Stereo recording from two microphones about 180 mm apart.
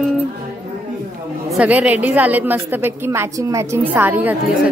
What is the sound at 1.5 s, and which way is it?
A woman's voice, 5° right (ahead or behind).